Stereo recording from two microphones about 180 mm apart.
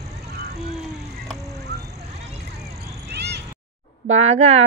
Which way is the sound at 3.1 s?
65° right (ahead or behind).